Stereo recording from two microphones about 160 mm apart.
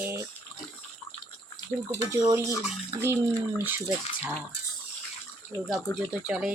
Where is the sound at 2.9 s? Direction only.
20° right (ahead or behind).